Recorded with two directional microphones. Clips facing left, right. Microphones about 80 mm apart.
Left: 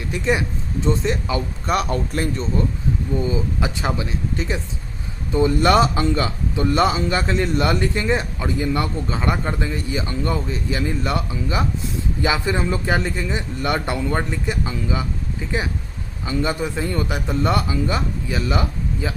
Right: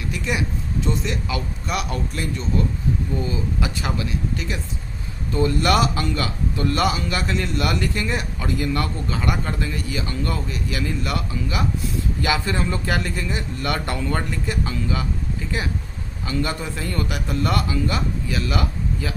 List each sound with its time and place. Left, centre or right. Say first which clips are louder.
0.1 s a man's voice: left 5 dB; left
3.2 s speech: left 3 dB; left
5.3 s speech: left 3 dB; centre
16.2 s speech: left 3 dB; left